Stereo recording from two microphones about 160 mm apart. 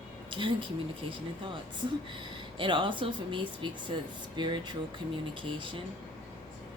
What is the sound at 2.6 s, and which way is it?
Speech, 30° right (ahead or behind).